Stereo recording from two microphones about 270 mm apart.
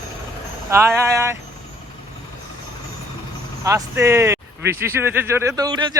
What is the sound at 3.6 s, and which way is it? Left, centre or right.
Speech, centre.